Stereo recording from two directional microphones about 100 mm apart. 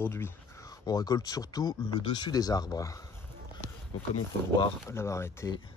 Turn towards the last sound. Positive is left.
turn(degrees=25)  # may be behind; listen again after turning